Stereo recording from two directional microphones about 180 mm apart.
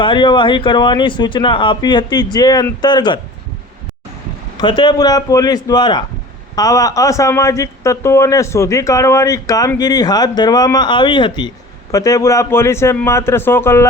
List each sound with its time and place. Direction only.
0.0 s speech: 25° left (ahead or behind)
4.5 s a man's voice: 25° left (ahead or behind)